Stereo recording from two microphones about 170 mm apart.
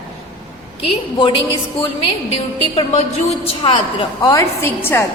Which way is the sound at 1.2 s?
30° left (ahead or behind).